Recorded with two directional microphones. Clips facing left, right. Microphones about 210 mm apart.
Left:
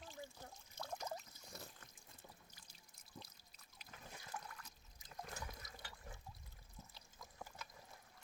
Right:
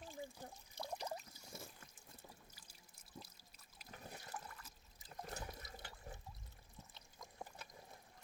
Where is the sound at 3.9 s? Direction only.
35° right (ahead or behind).